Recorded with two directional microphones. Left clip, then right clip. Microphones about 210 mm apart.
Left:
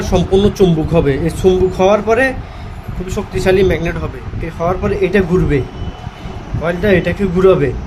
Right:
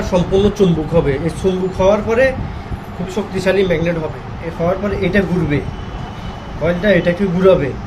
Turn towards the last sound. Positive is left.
turn(degrees=55)  # may be behind; listen again after turning